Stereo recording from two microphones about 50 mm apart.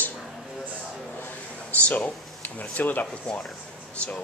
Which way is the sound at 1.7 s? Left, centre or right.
Left.